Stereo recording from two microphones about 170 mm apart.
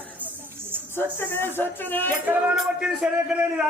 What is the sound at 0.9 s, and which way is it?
Speech, 15° left (ahead or behind).